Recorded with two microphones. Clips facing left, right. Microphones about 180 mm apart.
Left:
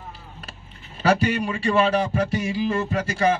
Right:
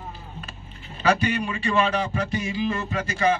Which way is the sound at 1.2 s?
45° left (ahead or behind).